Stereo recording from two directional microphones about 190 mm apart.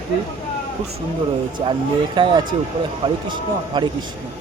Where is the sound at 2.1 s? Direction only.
25° right (ahead or behind).